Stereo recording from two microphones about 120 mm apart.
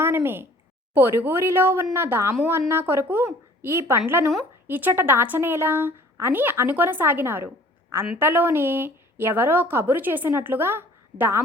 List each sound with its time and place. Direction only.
0.0 s a woman's voice: 20° right (ahead or behind)